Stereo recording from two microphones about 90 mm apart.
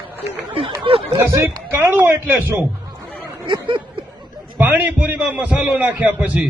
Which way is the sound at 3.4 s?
65° right (ahead or behind).